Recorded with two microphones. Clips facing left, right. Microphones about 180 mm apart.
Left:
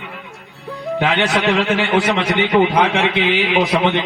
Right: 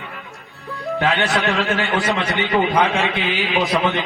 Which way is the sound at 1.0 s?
20° left (ahead or behind).